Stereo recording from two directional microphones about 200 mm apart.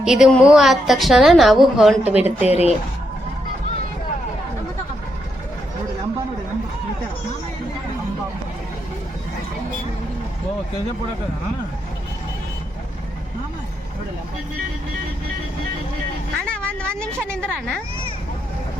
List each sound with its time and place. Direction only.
0.0 s a woman's voice: centre (ahead or behind)
2.5 s speech: 30° left (ahead or behind)
16.5 s a sound: 5° left (ahead or behind)
17.3 s a woman's voice: 5° left (ahead or behind)